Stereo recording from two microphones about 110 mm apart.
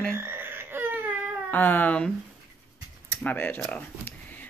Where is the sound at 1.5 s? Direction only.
15° left (ahead or behind).